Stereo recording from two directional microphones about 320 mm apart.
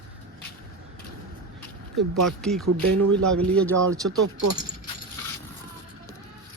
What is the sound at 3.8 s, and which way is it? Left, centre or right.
Speech, right.